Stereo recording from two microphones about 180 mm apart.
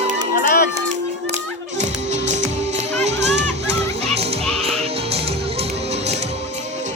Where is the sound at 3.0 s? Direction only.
40° right (ahead or behind).